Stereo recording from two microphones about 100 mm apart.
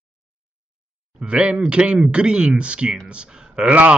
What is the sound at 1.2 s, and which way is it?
A man's voice, 10° right (ahead or behind).